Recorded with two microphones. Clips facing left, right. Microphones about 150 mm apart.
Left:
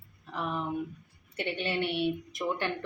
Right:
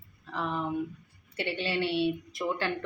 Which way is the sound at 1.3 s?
20° left (ahead or behind).